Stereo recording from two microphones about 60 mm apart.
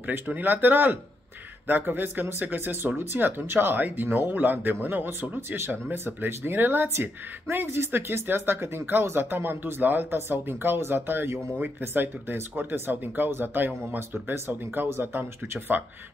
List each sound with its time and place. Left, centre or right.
0.3 s speech: right